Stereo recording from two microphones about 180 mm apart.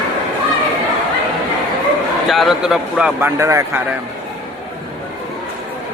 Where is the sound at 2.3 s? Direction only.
Centre (ahead or behind).